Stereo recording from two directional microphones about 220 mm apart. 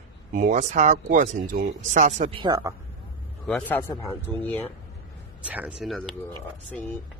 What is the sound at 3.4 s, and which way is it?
Speech, 5° left (ahead or behind).